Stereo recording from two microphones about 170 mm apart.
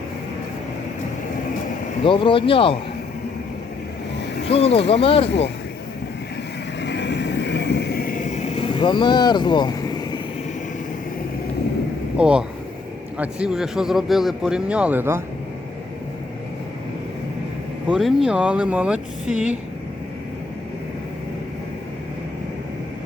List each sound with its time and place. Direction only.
2.0 s speech: 30° left (ahead or behind)
4.4 s speech: 35° left (ahead or behind)
6.8 s vehicle: 90° left; by 10.2 s 25° left (ahead or behind)
12.1 s speech: 5° right (ahead or behind)
17.8 s speech: 5° right (ahead or behind)